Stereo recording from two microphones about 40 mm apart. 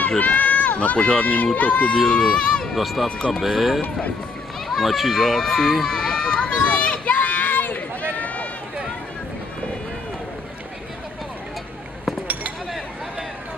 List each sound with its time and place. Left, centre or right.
0.2 s run: left
0.9 s speech: left
1.2 s speech: left
2.0 s speech: centre
2.7 s speech: centre
5.9 s run: centre
6.2 s run: left
7.2 s run: left